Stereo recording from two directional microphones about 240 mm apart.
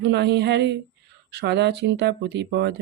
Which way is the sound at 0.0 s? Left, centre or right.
Right.